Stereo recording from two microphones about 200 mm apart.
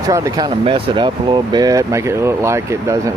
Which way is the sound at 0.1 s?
15° right (ahead or behind).